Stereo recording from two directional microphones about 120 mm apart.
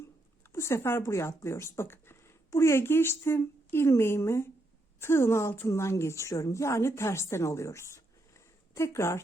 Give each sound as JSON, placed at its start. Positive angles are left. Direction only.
{"t": 0.5, "sound": "a woman's voice", "side_deg": 25}